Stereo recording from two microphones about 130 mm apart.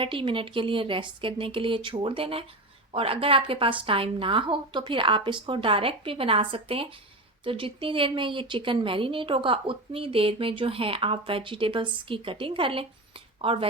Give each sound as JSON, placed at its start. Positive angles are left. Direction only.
{"t": 0.0, "sound": "speech", "side_deg": -40}